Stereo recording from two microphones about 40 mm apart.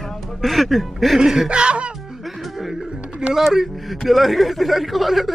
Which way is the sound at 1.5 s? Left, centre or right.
Right.